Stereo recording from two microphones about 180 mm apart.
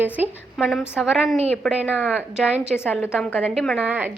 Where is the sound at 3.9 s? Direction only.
10° right (ahead or behind).